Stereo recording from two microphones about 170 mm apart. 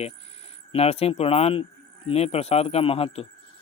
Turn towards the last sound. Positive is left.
turn(degrees=35)  # may be behind; listen again after turning